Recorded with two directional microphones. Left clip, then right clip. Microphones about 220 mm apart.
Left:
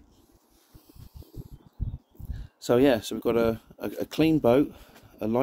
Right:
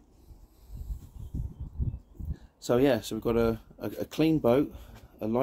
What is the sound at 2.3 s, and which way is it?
Speech, 35° left (ahead or behind).